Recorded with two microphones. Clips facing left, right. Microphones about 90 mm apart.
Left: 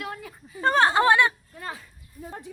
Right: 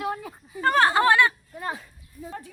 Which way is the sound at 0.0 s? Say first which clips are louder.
Right 6 dB; 25° right (ahead or behind).